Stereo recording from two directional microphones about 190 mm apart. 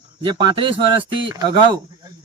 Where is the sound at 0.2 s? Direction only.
25° right (ahead or behind).